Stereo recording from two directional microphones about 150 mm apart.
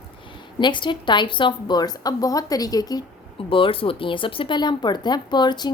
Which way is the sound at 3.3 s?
35° left (ahead or behind).